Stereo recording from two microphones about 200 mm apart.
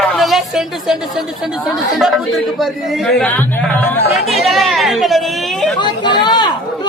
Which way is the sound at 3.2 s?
5° left (ahead or behind).